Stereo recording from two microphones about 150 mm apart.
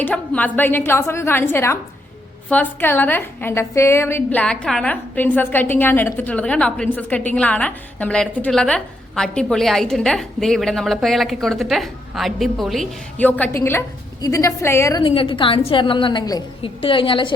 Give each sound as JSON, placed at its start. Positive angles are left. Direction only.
{"t": 0.0, "sound": "a woman's voice", "side_deg": 10}
{"t": 13.4, "sound": "a woman's voice", "side_deg": 15}
{"t": 15.0, "sound": "a woman's voice", "side_deg": 35}